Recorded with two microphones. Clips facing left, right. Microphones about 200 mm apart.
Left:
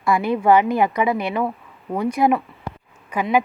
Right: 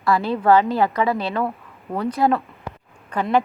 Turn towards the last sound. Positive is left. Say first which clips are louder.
# even
turn(degrees=10)  # may be behind; listen again after turning